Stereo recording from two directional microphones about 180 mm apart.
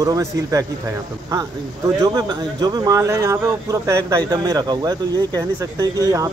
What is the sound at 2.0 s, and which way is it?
A man's voice, 20° right (ahead or behind).